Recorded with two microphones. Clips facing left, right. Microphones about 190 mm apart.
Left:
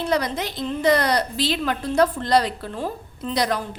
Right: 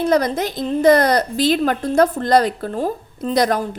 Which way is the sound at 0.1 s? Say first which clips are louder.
Right 6 dB; 45° right (ahead or behind).